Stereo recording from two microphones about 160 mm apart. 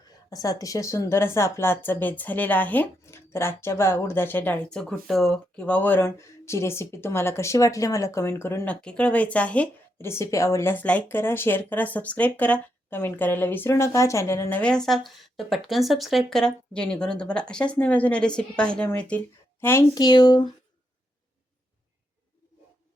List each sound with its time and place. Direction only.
0.3 s speech: 20° left (ahead or behind)
19.9 s speech: 25° left (ahead or behind)